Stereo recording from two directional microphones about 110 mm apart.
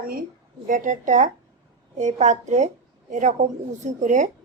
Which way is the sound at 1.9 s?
90° right.